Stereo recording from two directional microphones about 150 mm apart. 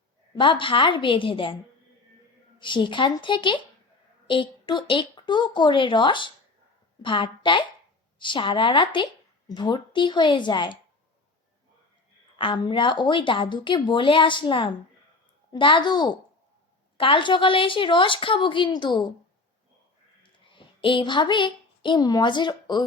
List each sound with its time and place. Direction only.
0.3 s a woman's voice: 35° left (ahead or behind)
2.6 s a woman's voice: 30° left (ahead or behind)
12.4 s a woman's voice: 35° left (ahead or behind)
20.8 s a woman's voice: 35° left (ahead or behind)